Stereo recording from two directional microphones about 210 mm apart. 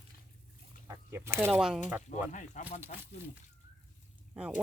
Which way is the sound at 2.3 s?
35° left (ahead or behind).